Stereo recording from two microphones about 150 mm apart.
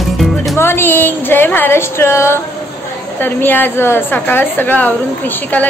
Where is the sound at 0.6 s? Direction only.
15° left (ahead or behind).